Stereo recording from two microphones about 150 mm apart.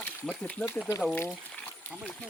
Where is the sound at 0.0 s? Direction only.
10° left (ahead or behind).